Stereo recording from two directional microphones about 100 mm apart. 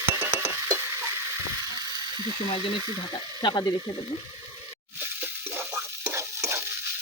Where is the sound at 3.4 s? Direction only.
50° left (ahead or behind).